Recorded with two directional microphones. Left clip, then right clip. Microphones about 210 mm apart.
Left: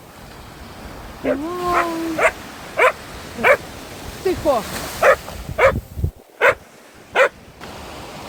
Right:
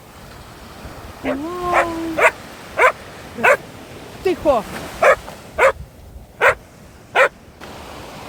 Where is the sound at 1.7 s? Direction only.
15° right (ahead or behind).